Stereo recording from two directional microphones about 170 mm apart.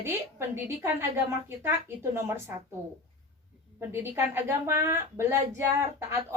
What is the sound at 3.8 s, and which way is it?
A woman's voice, 15° right (ahead or behind).